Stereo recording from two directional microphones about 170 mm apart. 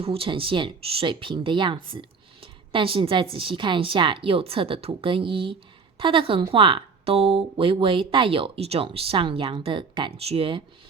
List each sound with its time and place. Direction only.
0.0 s speech: 35° right (ahead or behind)